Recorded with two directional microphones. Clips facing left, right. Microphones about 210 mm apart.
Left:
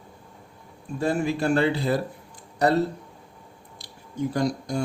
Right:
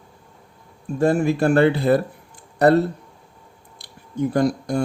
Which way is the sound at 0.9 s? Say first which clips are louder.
Right 6 dB; 50° right (ahead or behind).